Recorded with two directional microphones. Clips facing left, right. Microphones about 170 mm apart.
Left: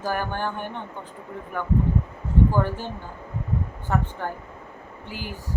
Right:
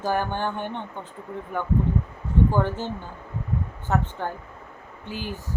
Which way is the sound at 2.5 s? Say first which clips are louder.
Even; 20° right (ahead or behind).